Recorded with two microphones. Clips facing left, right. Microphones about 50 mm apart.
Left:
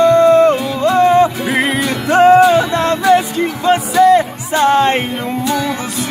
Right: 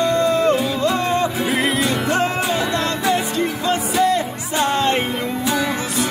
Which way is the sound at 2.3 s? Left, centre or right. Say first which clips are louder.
Left 12 dB; left.